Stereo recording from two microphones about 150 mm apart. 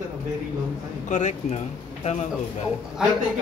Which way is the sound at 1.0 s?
50° left (ahead or behind).